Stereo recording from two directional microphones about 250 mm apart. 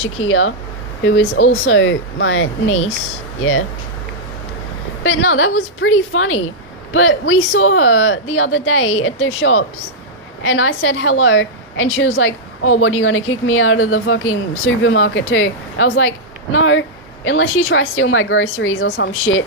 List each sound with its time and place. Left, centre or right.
0.0 s a woman's voice: left
5.0 s a woman's voice: left